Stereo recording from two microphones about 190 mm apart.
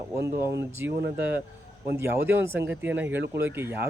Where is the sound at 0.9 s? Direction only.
65° right (ahead or behind).